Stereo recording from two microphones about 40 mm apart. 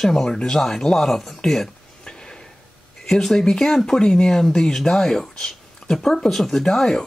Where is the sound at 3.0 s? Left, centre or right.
Centre.